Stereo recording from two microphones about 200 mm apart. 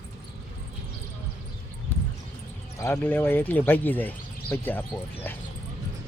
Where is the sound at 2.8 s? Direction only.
10° left (ahead or behind).